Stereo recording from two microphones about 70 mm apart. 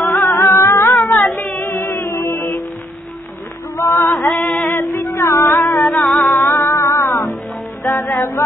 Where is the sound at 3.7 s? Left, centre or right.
Left.